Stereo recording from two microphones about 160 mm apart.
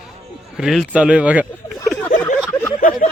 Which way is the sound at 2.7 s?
60° left (ahead or behind).